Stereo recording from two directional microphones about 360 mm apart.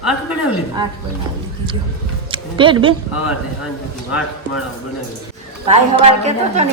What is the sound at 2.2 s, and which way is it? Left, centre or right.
Speech, centre.